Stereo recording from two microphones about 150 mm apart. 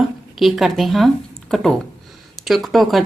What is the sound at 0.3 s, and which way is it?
A woman's voice, centre (ahead or behind).